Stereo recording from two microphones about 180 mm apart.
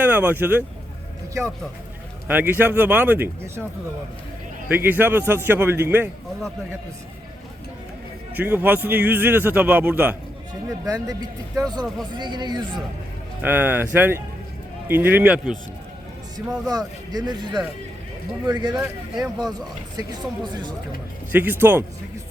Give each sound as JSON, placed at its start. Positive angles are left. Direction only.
{"t": 0.0, "sound": "speech", "side_deg": -10}
{"t": 4.7, "sound": "speech", "side_deg": -10}
{"t": 8.4, "sound": "speech", "side_deg": -10}
{"t": 10.8, "sound": "speech", "side_deg": -20}
{"t": 13.4, "sound": "speech", "side_deg": -10}
{"t": 16.6, "sound": "speech", "side_deg": -20}
{"t": 21.3, "sound": "speech", "side_deg": -10}